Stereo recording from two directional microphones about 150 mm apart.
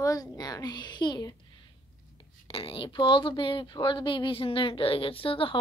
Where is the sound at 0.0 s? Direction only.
25° left (ahead or behind).